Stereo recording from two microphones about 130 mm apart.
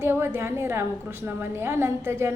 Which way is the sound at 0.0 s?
20° right (ahead or behind).